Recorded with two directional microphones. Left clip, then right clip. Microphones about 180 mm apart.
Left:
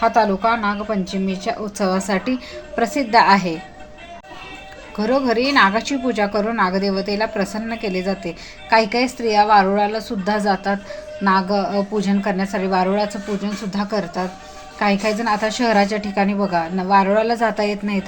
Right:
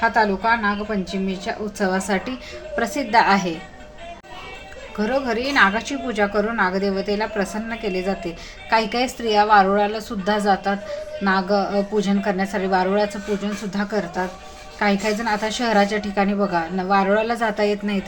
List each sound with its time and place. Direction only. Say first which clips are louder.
0.0 s a woman's voice: left 2 dB; 20° left (ahead or behind)
5.3 s a woman's voice: left 2 dB; 15° left (ahead or behind)